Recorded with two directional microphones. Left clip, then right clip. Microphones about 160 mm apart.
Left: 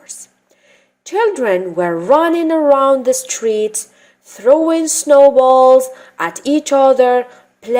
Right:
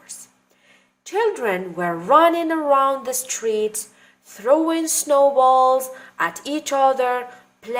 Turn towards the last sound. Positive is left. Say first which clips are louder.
# left 10 dB
turn(degrees=35)  # may be behind; listen again after turning